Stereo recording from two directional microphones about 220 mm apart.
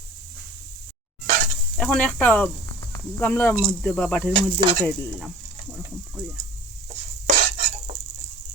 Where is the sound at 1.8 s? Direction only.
5° left (ahead or behind).